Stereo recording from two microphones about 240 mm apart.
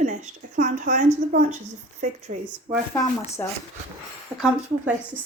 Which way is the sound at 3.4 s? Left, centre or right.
Centre.